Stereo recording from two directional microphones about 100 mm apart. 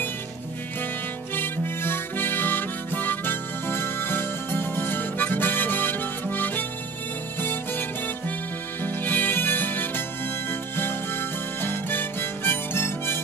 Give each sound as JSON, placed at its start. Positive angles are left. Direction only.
{"t": 1.3, "sound": "harmonica", "side_deg": 20}
{"t": 7.3, "sound": "music", "side_deg": 20}
{"t": 8.8, "sound": "music", "side_deg": 20}